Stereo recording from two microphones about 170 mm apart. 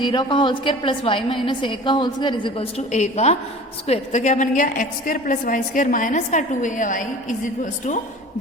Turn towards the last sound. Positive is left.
turn(degrees=45)  # may be behind; listen again after turning